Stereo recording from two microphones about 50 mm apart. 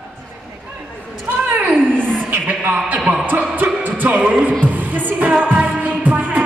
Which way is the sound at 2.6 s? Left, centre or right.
Right.